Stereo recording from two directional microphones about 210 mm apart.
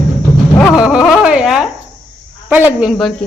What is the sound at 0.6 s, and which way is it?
Speech, 5° right (ahead or behind).